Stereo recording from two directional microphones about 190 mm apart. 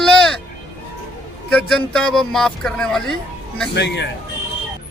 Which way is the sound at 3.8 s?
65° left (ahead or behind).